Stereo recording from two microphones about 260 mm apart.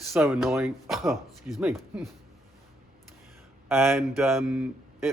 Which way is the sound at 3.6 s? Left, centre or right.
Centre.